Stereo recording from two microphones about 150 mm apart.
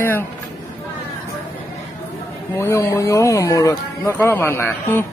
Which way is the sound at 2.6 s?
20° left (ahead or behind).